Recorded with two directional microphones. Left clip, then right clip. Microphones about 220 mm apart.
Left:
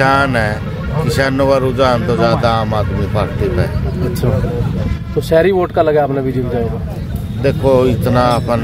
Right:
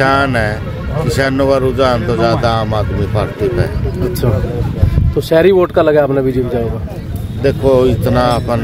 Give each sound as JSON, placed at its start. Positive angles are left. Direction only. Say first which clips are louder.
{"t": 0.0, "sound": "speech", "louder": "even", "side_deg": -5}
{"t": 5.3, "sound": "speech", "louder": "right 2 dB", "side_deg": -50}
{"t": 7.4, "sound": "speech", "louder": "right 1 dB", "side_deg": -5}